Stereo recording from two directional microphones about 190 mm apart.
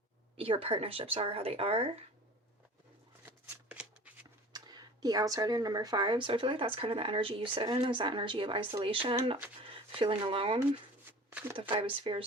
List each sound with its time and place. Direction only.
0.3 s speech: 30° right (ahead or behind)
3.2 s shuffling cards: 10° right (ahead or behind)
4.5 s speech: 20° right (ahead or behind)
11.3 s a sound: 10° right (ahead or behind)
12.1 s speech: 30° right (ahead or behind)